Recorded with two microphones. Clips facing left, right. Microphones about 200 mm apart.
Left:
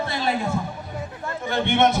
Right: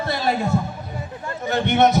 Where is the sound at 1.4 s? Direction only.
40° right (ahead or behind).